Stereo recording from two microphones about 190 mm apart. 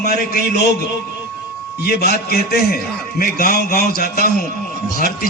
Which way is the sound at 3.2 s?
50° left (ahead or behind).